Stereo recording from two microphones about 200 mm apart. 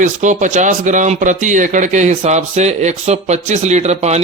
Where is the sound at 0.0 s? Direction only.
40° right (ahead or behind).